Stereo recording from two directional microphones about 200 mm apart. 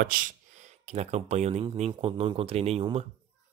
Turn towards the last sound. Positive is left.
turn(degrees=-30)  # may be behind; listen again after turning